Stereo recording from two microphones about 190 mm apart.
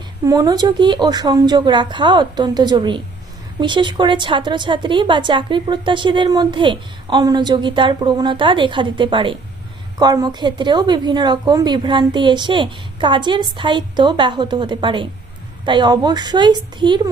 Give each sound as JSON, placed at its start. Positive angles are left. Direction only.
{"t": 0.3, "sound": "a woman's voice", "side_deg": -20}